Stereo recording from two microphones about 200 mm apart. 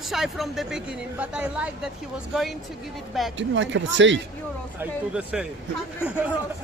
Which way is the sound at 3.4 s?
65° right (ahead or behind).